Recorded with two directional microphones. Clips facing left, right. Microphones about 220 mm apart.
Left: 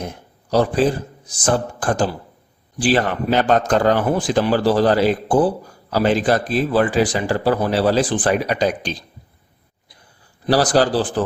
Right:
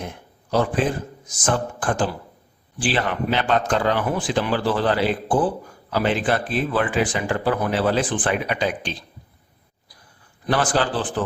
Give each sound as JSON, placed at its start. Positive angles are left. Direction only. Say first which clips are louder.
{"t": 0.0, "sound": "a man's voice", "louder": "left 4 dB", "side_deg": 40}
{"t": 10.4, "sound": "a man's voice", "louder": "left 5 dB", "side_deg": 35}